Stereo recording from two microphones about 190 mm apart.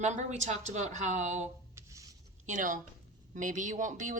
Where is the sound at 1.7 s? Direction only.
15° right (ahead or behind).